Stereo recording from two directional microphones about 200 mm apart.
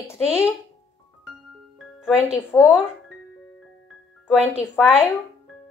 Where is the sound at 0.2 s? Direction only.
5° right (ahead or behind).